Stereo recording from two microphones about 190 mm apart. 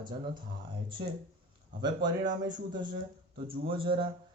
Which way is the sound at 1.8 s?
20° right (ahead or behind).